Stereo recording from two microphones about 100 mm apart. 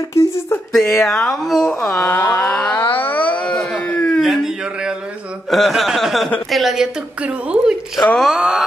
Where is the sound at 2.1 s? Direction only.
20° left (ahead or behind).